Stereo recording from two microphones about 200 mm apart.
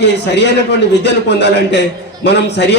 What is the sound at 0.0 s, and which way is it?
A man's voice, 60° left (ahead or behind).